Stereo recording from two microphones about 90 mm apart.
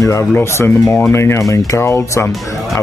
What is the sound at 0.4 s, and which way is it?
Speech, 30° left (ahead or behind).